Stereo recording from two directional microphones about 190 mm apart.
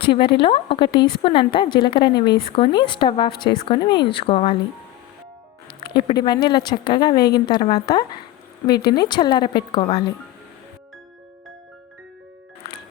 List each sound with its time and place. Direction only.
0.0 s speech: 25° left (ahead or behind)
5.8 s speech: 25° left (ahead or behind)